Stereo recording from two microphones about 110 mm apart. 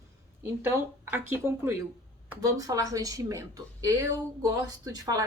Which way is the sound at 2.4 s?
30° right (ahead or behind).